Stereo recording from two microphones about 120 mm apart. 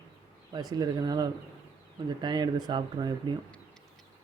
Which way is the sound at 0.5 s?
35° right (ahead or behind).